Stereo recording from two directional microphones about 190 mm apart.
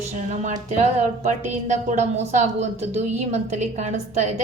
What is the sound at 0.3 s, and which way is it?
A woman's voice, 40° right (ahead or behind).